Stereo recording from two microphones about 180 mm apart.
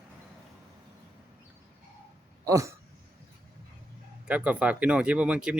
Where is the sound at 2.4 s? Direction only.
15° right (ahead or behind).